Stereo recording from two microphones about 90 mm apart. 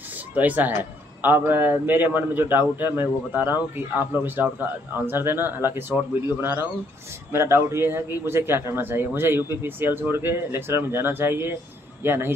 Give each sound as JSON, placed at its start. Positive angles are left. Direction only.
{"t": 0.3, "sound": "speech", "side_deg": -20}
{"t": 7.3, "sound": "a man's voice", "side_deg": -30}